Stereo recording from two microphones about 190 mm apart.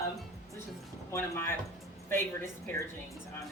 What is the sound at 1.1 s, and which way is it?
Speech, 15° left (ahead or behind).